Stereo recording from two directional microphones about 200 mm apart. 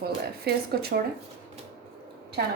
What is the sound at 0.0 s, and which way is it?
Speech, 50° right (ahead or behind).